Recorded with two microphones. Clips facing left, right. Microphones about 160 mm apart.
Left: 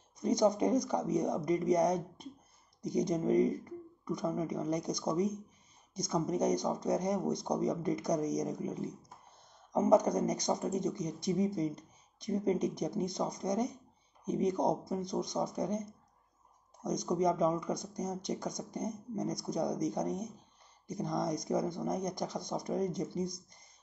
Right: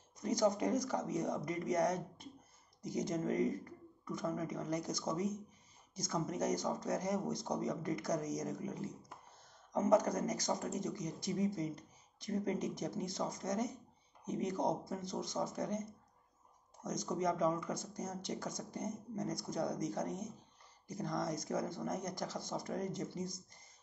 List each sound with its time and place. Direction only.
0.2 s speech: 20° left (ahead or behind)